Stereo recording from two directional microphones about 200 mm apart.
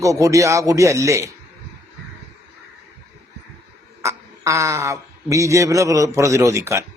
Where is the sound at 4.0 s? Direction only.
15° right (ahead or behind).